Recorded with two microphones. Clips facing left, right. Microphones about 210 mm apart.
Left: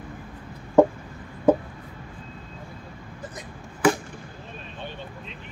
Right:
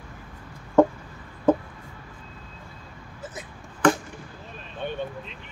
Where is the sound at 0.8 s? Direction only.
10° left (ahead or behind).